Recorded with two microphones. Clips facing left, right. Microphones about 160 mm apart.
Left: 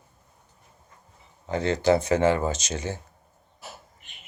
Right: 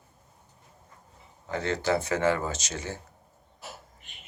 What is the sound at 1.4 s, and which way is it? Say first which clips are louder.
Speech: left 6 dB; 20° left (ahead or behind).